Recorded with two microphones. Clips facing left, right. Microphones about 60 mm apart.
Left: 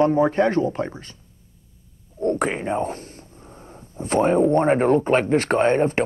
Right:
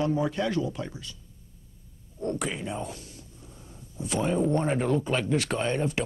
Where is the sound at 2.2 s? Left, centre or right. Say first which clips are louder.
Left 9 dB; left.